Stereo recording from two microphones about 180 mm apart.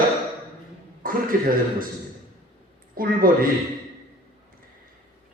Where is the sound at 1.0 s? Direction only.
50° right (ahead or behind).